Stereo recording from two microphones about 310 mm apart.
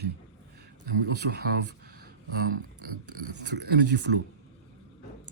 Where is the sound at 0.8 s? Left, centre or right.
Right.